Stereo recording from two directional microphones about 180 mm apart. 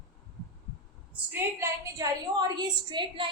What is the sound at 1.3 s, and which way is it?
A woman's voice, 15° right (ahead or behind).